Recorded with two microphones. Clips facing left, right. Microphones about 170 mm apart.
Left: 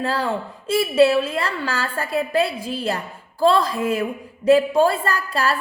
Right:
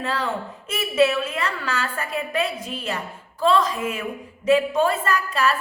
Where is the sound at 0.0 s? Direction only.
35° left (ahead or behind).